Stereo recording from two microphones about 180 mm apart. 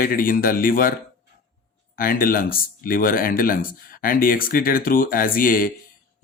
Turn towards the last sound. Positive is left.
turn(degrees=50)  # may be behind; listen again after turning